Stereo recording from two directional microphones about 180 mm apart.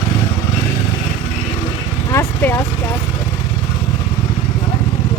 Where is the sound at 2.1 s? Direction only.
15° left (ahead or behind).